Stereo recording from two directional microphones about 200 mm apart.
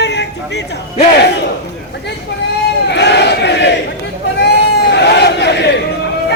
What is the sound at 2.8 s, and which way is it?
Battle cry, 60° left (ahead or behind).